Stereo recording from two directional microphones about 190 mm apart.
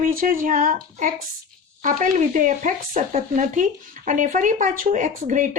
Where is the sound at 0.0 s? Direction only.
50° right (ahead or behind).